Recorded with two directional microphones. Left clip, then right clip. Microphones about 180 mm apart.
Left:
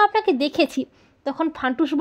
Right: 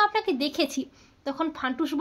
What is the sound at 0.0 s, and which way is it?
A woman's voice, 40° left (ahead or behind).